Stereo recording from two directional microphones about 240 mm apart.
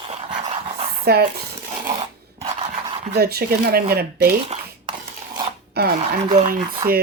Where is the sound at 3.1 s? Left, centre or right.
Right.